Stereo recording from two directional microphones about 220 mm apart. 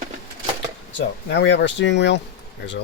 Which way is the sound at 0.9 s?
55° left (ahead or behind).